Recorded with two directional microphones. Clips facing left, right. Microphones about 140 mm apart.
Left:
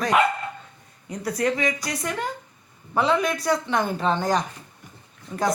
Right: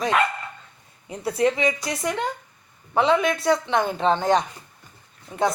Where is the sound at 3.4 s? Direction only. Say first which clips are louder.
Right 2 dB; 25° right (ahead or behind).